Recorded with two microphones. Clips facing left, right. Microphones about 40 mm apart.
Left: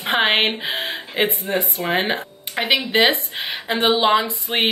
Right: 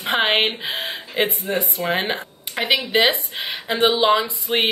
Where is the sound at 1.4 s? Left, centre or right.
Left.